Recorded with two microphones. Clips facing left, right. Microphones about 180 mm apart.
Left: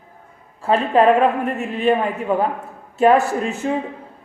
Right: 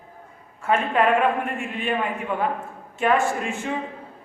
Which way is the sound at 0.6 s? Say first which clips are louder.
Left 6 dB; 35° left (ahead or behind).